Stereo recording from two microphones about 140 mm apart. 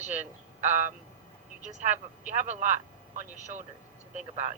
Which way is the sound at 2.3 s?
65° right (ahead or behind).